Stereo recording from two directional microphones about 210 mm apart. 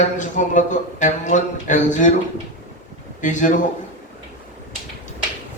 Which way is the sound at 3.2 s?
35° left (ahead or behind).